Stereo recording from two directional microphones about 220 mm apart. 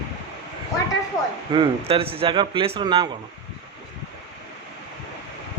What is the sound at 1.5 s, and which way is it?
A man's voice, 20° right (ahead or behind).